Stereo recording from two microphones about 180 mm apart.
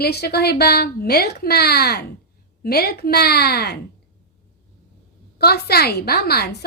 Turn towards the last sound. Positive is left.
turn(degrees=60)  # may be behind; listen again after turning